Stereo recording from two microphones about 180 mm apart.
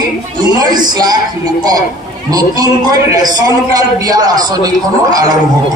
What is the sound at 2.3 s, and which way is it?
A man's voice, 20° right (ahead or behind).